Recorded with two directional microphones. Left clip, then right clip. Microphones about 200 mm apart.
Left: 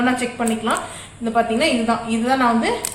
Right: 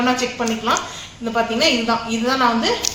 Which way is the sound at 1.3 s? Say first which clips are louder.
Even; 5° left (ahead or behind).